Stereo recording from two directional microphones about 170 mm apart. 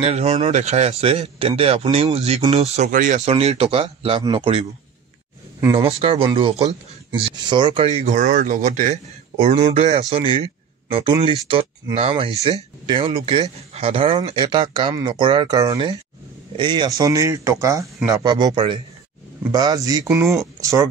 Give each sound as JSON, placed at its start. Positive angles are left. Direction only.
{"t": 0.0, "sound": "speech", "side_deg": -40}
{"t": 5.8, "sound": "speech", "side_deg": -35}
{"t": 20.1, "sound": "speech", "side_deg": -5}
{"t": 20.6, "sound": "speech", "side_deg": -20}